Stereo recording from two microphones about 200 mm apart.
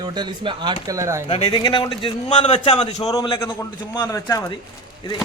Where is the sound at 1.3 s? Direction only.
30° left (ahead or behind).